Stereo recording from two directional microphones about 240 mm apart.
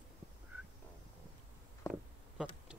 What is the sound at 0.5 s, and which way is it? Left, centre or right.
Frog, centre.